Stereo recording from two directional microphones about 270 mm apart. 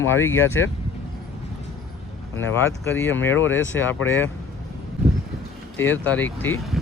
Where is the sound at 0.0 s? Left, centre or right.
Centre.